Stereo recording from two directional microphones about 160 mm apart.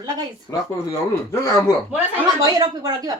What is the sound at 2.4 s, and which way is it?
Speech, 25° right (ahead or behind).